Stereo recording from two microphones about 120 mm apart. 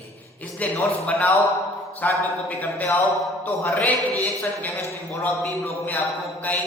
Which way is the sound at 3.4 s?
15° left (ahead or behind).